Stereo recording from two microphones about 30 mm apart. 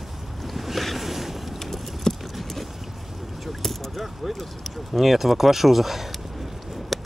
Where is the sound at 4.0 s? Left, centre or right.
Centre.